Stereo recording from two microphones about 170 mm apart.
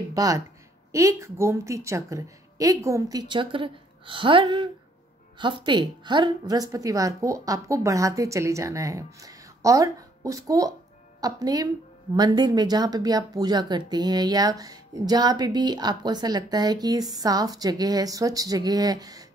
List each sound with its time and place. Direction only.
0.1 s speech: 20° right (ahead or behind)